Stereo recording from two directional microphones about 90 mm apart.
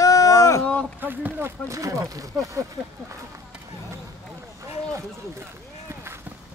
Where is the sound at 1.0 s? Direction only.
20° right (ahead or behind); by 2.6 s 35° right (ahead or behind).